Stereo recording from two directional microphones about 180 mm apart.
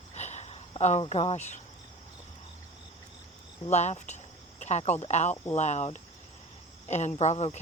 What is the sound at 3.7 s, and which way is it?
Speech, 40° left (ahead or behind).